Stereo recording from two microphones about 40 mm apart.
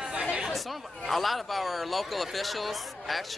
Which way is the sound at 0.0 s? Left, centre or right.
Centre.